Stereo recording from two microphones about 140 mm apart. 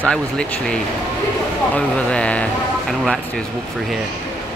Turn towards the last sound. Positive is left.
turn(degrees=5)  # may be behind; listen again after turning